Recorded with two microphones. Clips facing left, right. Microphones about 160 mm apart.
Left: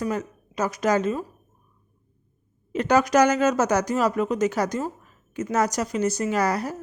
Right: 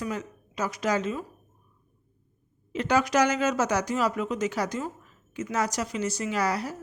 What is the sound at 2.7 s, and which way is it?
Speech, 45° left (ahead or behind).